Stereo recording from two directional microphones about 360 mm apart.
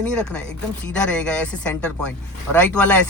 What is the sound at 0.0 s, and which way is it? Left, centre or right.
Speech, centre.